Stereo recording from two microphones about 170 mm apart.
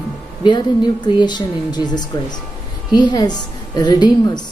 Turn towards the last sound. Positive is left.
turn(degrees=25)  # may be behind; listen again after turning